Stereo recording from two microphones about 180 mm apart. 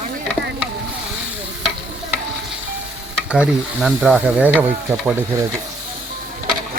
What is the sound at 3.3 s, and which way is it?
Stir, 5° right (ahead or behind).